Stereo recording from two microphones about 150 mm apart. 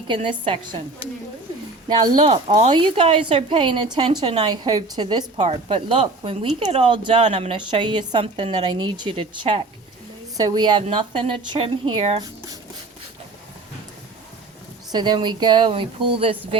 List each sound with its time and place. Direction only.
0.1 s a woman's voice: 35° right (ahead or behind)
1.9 s a woman's voice: 30° right (ahead or behind)
2.3 s speech: 45° right (ahead or behind)
2.6 s a woman's voice: 35° right (ahead or behind)
5.4 s a woman's voice: 40° right (ahead or behind)
14.9 s a woman's voice: 30° right (ahead or behind)